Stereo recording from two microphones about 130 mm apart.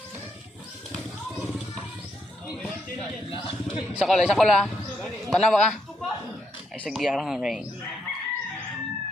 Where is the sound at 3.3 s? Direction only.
40° left (ahead or behind).